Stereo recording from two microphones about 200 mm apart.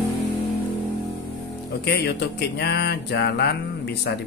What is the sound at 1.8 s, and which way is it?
Speech, 55° left (ahead or behind).